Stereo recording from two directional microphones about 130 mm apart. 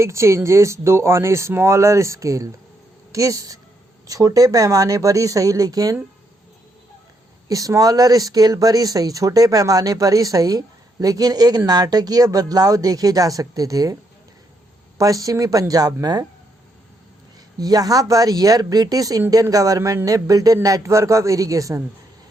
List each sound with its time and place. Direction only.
0.0 s speech: 20° right (ahead or behind)
7.4 s speech: 25° right (ahead or behind)
14.9 s speech: 25° right (ahead or behind)
17.6 s speech: 30° right (ahead or behind)